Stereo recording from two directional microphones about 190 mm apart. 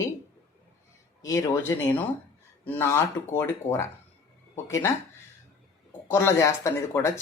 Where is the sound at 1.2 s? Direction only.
15° left (ahead or behind).